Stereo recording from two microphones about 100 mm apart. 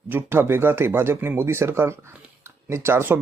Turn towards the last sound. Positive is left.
turn(degrees=-20)  # may be behind; listen again after turning